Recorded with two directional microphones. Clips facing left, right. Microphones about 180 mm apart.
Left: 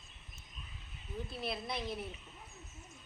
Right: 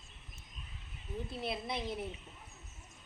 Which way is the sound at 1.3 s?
20° right (ahead or behind).